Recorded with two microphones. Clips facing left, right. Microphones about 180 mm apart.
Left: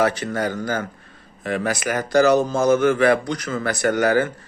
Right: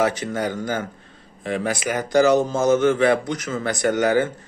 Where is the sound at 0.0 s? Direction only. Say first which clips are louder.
Left 1 dB; 15° right (ahead or behind).